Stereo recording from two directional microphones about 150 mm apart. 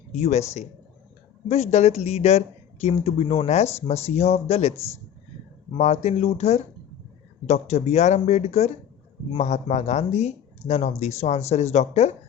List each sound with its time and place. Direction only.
0.1 s speech: 50° left (ahead or behind)
5.7 s speech: 45° left (ahead or behind)